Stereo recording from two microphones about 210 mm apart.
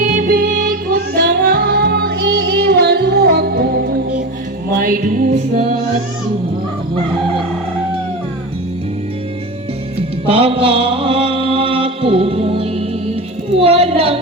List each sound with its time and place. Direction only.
0.0 s music: 40° right (ahead or behind)
10.2 s mantra: 25° right (ahead or behind)
13.5 s a sound: 30° right (ahead or behind)